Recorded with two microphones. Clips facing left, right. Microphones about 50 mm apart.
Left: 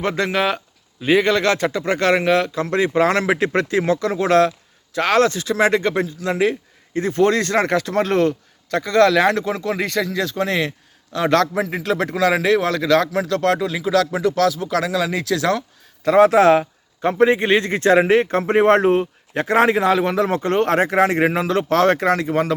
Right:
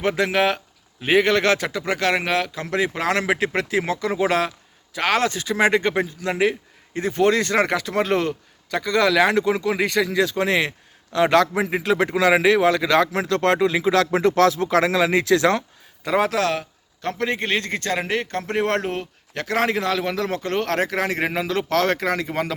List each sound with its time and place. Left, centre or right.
0.0 s speech: centre
10.3 s speech: right
11.2 s speech: centre
13.2 s speech: right
16.0 s speech: centre
16.4 s speech: left
17.0 s a man's voice: centre